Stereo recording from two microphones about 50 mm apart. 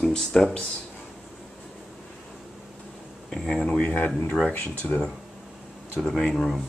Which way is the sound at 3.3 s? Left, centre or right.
Centre.